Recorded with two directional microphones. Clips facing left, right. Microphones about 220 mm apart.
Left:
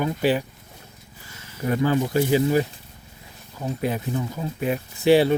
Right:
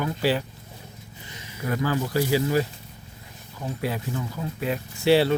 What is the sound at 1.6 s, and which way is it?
Speech, 20° left (ahead or behind).